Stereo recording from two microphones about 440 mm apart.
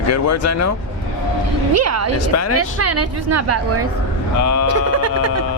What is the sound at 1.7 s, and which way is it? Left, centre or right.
Speech, right.